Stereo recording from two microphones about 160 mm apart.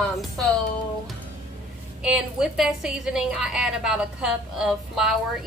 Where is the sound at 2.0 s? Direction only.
5° right (ahead or behind).